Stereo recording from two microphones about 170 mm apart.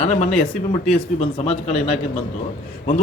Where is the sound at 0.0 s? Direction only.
40° left (ahead or behind).